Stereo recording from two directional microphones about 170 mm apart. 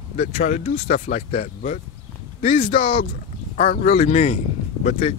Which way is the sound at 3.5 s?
50° left (ahead or behind).